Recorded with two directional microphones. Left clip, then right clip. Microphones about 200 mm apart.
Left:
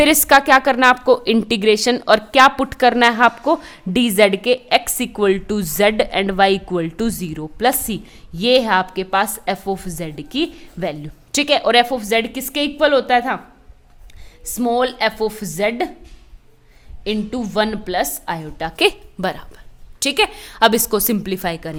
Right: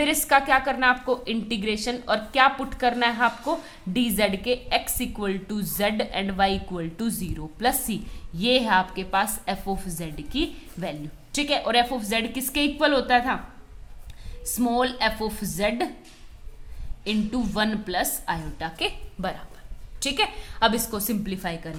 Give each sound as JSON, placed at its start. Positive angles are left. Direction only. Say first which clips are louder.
{"t": 0.0, "sound": "a woman's voice", "louder": "left 9 dB", "side_deg": 50}
{"t": 14.4, "sound": "a woman's voice", "louder": "left 6 dB", "side_deg": 40}
{"t": 17.0, "sound": "a woman's voice", "louder": "left 5 dB", "side_deg": 40}